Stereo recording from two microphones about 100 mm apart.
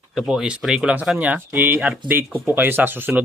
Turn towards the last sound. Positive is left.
turn(degrees=-20)  # may be behind; listen again after turning